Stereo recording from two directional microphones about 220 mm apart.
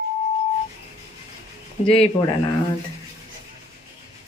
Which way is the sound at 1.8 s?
30° left (ahead or behind).